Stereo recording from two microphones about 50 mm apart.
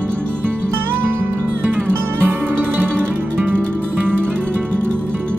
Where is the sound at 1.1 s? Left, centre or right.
Right.